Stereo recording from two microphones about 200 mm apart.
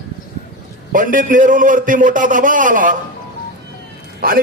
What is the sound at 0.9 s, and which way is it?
A man's voice, 40° right (ahead or behind).